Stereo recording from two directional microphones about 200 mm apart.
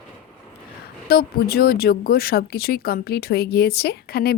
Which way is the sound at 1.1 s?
50° left (ahead or behind).